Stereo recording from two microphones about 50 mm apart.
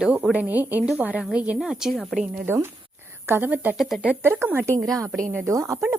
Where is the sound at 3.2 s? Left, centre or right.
Right.